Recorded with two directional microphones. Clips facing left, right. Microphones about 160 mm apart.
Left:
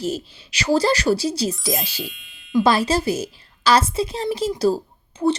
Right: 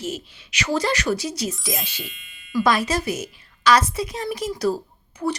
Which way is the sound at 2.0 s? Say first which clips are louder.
Left 5 dB; centre (ahead or behind).